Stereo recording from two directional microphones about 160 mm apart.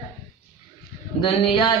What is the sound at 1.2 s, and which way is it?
Speech, 30° left (ahead or behind).